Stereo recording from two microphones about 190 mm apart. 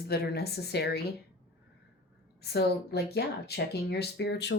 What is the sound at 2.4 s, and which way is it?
Speech, 60° left (ahead or behind).